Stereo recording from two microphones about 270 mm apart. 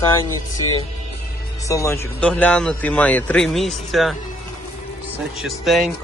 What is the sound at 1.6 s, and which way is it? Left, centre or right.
Speech, centre.